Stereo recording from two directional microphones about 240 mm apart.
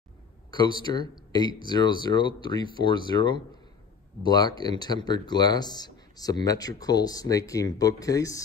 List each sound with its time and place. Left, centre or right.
0.5 s speech: centre